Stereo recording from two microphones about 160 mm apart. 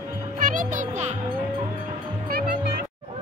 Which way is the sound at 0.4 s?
55° right (ahead or behind).